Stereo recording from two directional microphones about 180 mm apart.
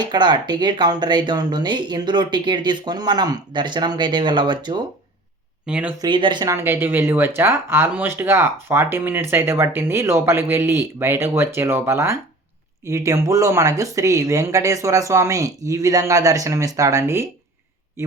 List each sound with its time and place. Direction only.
0.0 s speech: 25° right (ahead or behind)
5.6 s speech: 5° right (ahead or behind)
6.0 s speech: 25° right (ahead or behind)